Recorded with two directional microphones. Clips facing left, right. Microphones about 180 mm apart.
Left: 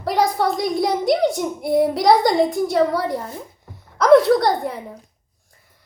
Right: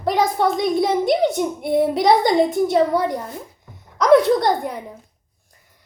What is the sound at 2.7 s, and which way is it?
Speech, 20° right (ahead or behind).